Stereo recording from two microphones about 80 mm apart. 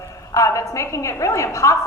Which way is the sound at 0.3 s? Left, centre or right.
Left.